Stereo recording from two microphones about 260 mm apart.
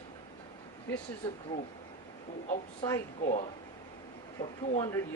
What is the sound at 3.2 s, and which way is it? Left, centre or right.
Speech, left.